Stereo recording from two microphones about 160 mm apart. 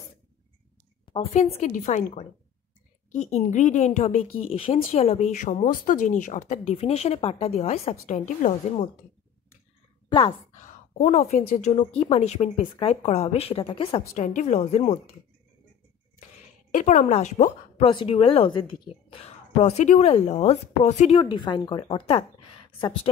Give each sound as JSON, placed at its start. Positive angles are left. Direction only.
{"t": 1.0, "sound": "a woman's voice", "side_deg": 35}
{"t": 11.0, "sound": "a woman's voice", "side_deg": 45}
{"t": 14.1, "sound": "a woman's voice", "side_deg": 45}
{"t": 16.7, "sound": "a woman's voice", "side_deg": 50}
{"t": 19.6, "sound": "a woman's voice", "side_deg": 45}
{"t": 21.2, "sound": "speech", "side_deg": 30}